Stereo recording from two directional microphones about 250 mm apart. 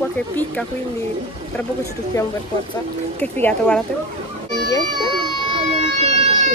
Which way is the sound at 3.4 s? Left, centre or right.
Centre.